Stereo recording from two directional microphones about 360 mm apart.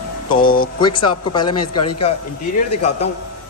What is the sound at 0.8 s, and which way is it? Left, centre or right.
A man's voice, centre.